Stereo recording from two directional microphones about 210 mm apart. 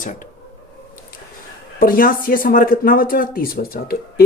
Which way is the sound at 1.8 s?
40° left (ahead or behind).